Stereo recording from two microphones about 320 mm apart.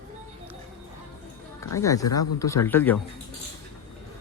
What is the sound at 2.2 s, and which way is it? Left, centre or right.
Speech, centre.